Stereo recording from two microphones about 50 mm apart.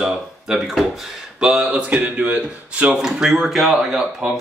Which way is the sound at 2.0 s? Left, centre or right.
Right.